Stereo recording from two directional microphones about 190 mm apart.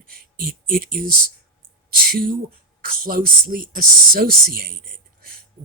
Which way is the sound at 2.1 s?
50° right (ahead or behind).